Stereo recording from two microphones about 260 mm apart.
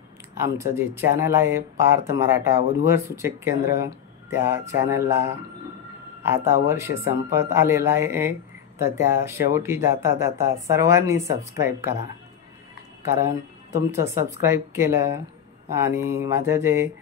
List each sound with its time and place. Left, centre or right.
0.3 s a man's voice: centre